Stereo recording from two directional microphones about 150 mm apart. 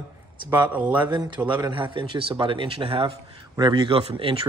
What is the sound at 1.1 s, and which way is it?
Speech, 30° right (ahead or behind).